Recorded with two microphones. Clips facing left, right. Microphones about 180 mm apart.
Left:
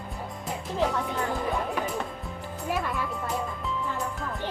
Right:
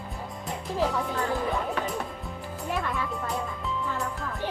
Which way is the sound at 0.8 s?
Centre (ahead or behind).